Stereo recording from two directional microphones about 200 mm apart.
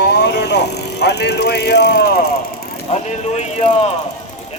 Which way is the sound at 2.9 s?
35° left (ahead or behind).